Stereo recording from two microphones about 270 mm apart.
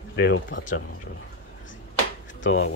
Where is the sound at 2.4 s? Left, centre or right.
Left.